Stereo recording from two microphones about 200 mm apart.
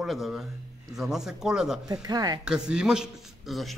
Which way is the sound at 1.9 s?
20° right (ahead or behind).